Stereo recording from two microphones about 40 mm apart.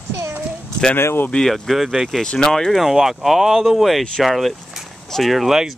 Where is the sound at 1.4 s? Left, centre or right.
Centre.